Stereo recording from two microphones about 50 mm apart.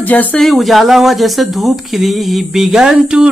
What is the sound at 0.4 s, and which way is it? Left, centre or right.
Speech, centre.